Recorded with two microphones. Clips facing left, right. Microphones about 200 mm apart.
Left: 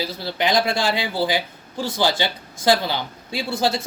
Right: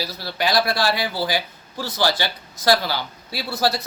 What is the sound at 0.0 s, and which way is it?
A woman's voice, 20° left (ahead or behind).